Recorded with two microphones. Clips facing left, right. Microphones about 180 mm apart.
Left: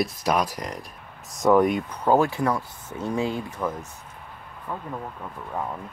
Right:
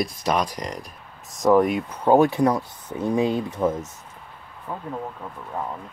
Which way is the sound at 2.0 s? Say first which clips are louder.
Right 4 dB; 20° right (ahead or behind).